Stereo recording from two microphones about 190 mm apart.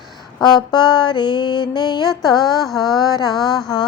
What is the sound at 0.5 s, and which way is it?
A woman's voice, 20° left (ahead or behind).